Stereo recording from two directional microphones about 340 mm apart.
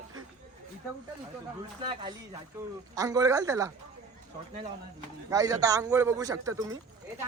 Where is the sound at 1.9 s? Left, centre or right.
Centre.